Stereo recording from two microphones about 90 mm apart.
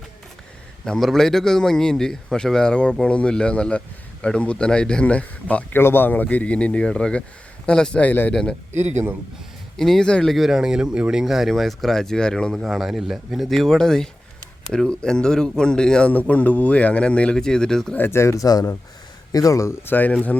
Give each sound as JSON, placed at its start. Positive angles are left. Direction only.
{"t": 0.9, "sound": "a man's voice", "side_deg": 5}
{"t": 9.7, "sound": "speech", "side_deg": 5}
{"t": 12.5, "sound": "a man's voice", "side_deg": 0}
{"t": 17.9, "sound": "speech", "side_deg": 25}